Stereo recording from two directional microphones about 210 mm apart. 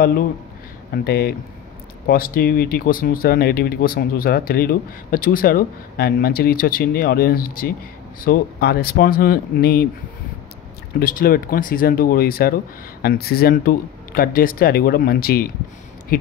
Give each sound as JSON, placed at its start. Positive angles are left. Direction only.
{"t": 0.9, "sound": "speech", "side_deg": 50}
{"t": 11.0, "sound": "speech", "side_deg": 45}